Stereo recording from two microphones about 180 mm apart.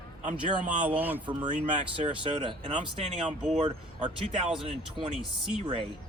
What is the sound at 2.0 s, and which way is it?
Speech, 30° right (ahead or behind).